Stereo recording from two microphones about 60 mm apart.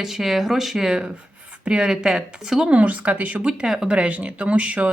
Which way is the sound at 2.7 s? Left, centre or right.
Right.